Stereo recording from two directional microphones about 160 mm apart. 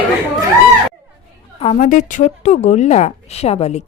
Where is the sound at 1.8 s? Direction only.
60° left (ahead or behind).